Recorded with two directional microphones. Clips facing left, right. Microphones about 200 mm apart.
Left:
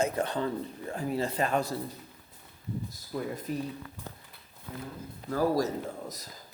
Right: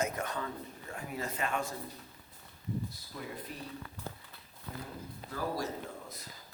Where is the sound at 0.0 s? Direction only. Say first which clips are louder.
Left 6 dB; 30° left (ahead or behind).